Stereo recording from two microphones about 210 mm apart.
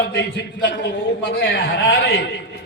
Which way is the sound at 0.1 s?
50° left (ahead or behind).